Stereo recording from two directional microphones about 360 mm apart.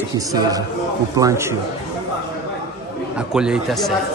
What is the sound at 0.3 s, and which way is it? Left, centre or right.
A man's voice, centre.